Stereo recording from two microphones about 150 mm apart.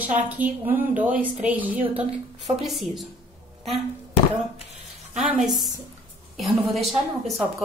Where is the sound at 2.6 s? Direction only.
Centre (ahead or behind).